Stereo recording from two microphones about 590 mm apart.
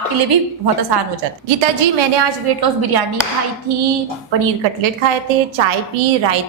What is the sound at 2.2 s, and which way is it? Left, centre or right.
Speech, right.